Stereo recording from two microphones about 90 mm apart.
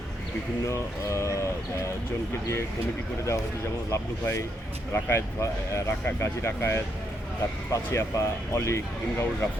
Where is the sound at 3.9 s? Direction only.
35° left (ahead or behind).